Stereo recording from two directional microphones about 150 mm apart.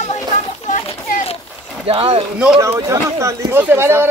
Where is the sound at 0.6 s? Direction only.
45° left (ahead or behind).